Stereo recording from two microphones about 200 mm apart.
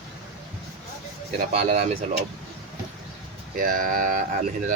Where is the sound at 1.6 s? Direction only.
35° right (ahead or behind).